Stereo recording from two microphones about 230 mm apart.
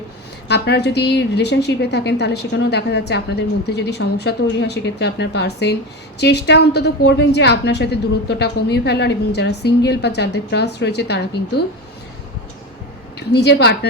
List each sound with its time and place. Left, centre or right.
0.4 s a woman's voice: left
13.1 s a woman's voice: left